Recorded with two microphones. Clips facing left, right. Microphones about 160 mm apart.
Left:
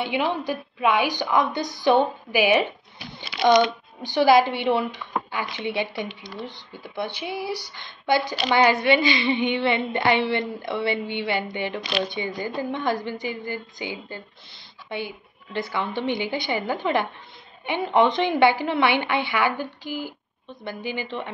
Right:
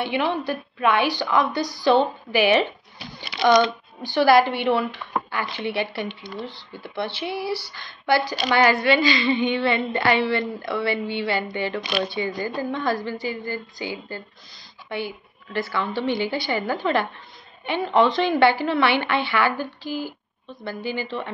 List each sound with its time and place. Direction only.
0.0 s a woman's voice: 15° left (ahead or behind)
3.2 s a sound: 20° left (ahead or behind)
4.0 s a woman's voice: 20° left (ahead or behind)